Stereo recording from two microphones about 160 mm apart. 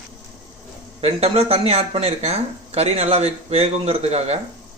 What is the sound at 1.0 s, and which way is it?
Speech, 40° right (ahead or behind).